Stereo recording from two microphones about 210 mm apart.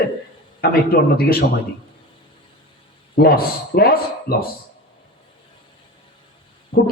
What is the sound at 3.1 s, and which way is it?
Speech, 45° left (ahead or behind).